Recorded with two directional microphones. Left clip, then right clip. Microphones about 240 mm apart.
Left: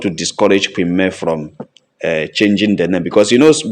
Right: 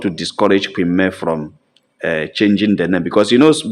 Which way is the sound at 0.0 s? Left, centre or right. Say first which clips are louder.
Left 2 dB; centre.